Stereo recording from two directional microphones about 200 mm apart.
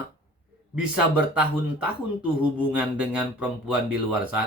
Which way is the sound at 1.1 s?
5° right (ahead or behind).